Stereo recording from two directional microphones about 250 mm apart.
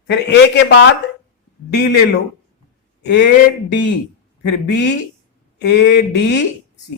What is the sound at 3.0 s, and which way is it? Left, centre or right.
Speech, left.